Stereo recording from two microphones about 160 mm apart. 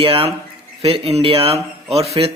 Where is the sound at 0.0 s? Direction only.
35° right (ahead or behind).